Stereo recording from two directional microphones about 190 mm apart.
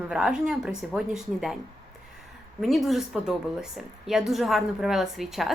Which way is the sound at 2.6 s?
Centre (ahead or behind).